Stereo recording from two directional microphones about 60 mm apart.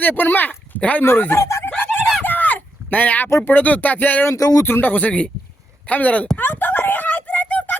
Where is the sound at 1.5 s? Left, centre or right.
Left.